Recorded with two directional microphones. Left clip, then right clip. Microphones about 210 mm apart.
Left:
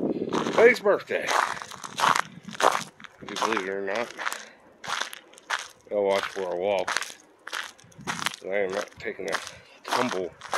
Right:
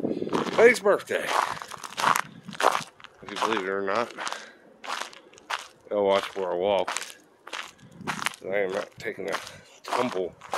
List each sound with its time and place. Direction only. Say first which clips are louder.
0.3 s a sound: even; centre (ahead or behind)
0.6 s speech: even; 15° right (ahead or behind)
1.3 s a sound: left 3 dB; centre (ahead or behind)
2.6 s crunch: left 1 dB; 5° right (ahead or behind)
3.6 s speech: right 2 dB; 20° right (ahead or behind)
4.4 s a sound: even; 5° left (ahead or behind)
5.9 s speech: right 1 dB; 15° right (ahead or behind)
6.8 s crushing: left 1 dB; 10° left (ahead or behind)
8.5 s speech: even; 15° right (ahead or behind)
9.8 s speech: left 1 dB; 5° left (ahead or behind)